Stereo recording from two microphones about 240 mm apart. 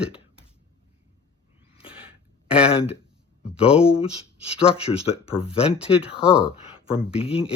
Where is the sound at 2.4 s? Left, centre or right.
Centre.